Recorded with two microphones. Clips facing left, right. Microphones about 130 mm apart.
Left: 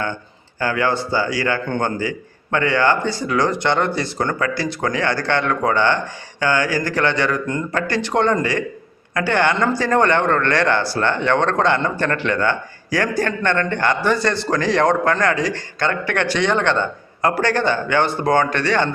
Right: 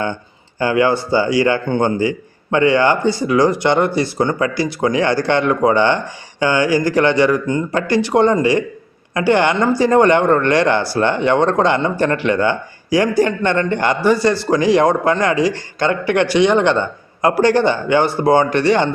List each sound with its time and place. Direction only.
0.6 s speech: 15° right (ahead or behind)